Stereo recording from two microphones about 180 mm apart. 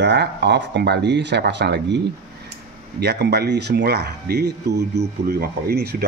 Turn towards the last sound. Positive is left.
turn(degrees=-60)  # may be behind; listen again after turning